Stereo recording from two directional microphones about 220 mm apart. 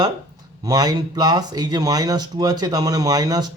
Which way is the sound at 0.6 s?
20° right (ahead or behind).